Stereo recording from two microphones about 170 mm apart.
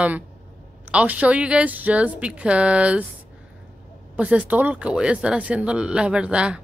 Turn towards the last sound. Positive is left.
turn(degrees=-5)  # may be behind; listen again after turning